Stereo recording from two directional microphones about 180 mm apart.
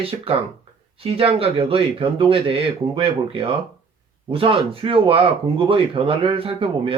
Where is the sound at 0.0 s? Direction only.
30° right (ahead or behind).